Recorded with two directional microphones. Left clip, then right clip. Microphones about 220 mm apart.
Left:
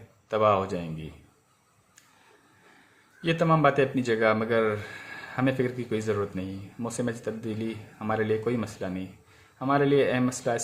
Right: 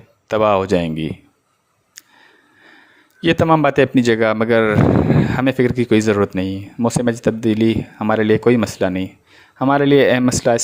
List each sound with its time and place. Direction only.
0.3 s speech: 45° right (ahead or behind)
3.2 s speech: 45° right (ahead or behind)